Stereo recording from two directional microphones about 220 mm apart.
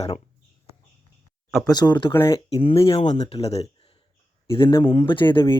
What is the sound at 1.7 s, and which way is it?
Speech, 20° left (ahead or behind).